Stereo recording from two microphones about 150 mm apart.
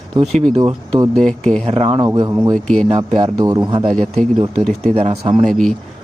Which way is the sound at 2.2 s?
25° right (ahead or behind).